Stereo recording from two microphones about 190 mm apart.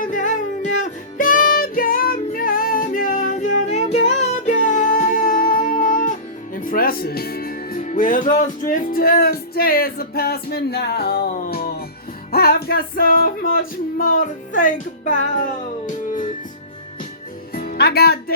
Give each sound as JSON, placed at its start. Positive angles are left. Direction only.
{"t": 0.0, "sound": "a sound", "side_deg": 45}
{"t": 1.2, "sound": "music", "side_deg": 45}
{"t": 11.3, "sound": "music", "side_deg": 45}
{"t": 17.5, "sound": "music", "side_deg": 50}